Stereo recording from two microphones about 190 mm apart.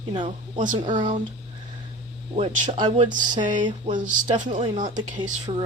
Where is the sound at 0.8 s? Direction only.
25° right (ahead or behind).